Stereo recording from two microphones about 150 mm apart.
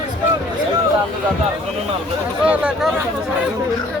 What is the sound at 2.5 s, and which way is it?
Speech, 5° right (ahead or behind).